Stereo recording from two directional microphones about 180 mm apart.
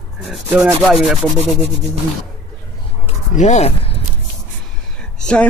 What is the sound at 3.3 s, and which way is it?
Speech, 40° left (ahead or behind).